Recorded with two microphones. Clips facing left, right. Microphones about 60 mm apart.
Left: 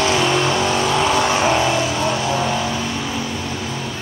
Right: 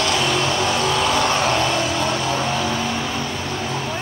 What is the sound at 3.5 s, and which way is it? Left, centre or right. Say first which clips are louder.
Music: right 1 dB; right.